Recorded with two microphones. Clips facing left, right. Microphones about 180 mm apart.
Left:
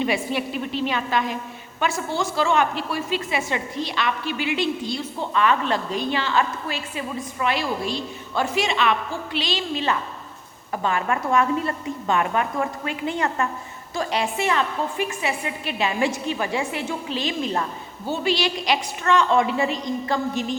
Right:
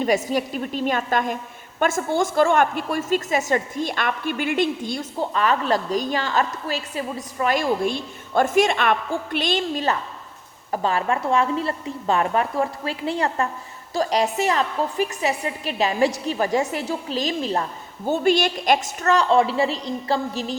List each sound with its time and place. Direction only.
0.0 s a woman's voice: 40° right (ahead or behind)
18.0 s a woman's voice: 50° right (ahead or behind)